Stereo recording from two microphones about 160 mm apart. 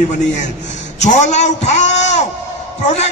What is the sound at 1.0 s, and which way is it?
A man's voice, 45° left (ahead or behind).